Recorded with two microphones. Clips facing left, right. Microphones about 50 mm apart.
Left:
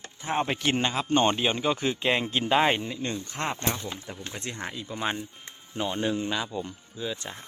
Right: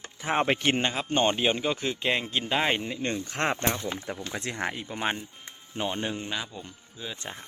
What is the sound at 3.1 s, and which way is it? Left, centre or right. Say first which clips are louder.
Speech: right 6 dB; right.